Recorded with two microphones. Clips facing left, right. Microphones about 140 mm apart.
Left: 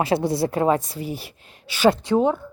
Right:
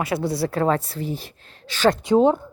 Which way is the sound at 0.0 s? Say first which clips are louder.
Left 3 dB; 25° left (ahead or behind).